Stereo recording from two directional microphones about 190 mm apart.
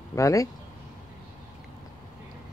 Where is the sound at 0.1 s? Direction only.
15° left (ahead or behind).